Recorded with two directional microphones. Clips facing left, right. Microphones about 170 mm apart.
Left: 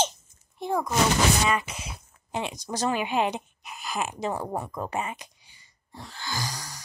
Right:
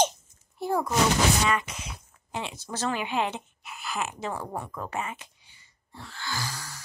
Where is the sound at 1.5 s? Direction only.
10° left (ahead or behind).